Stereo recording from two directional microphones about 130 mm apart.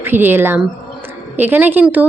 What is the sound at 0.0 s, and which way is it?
A woman's voice, 15° right (ahead or behind).